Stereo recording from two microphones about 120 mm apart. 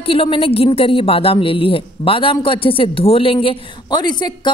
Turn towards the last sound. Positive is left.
turn(degrees=35)  # may be behind; listen again after turning